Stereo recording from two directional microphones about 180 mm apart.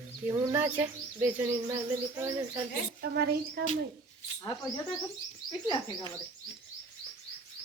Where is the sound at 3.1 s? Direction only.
60° right (ahead or behind).